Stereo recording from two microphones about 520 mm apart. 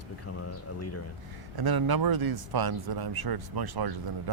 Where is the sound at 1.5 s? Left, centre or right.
Right.